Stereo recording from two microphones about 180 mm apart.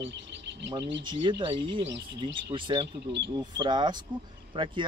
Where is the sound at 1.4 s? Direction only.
30° right (ahead or behind).